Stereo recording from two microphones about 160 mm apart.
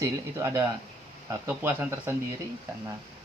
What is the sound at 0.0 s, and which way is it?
Speech, 20° right (ahead or behind).